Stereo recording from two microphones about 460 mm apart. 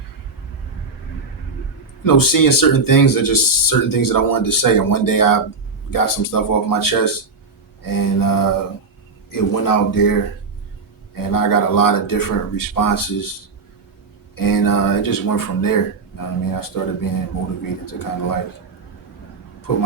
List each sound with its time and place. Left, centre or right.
2.0 s speech: left
14.3 s speech: left